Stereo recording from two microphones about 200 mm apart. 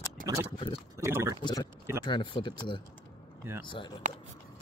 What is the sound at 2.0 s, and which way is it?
Speech, 25° left (ahead or behind).